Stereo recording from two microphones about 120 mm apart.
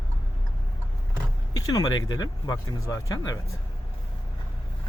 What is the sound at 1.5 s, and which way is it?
Speech, 35° left (ahead or behind).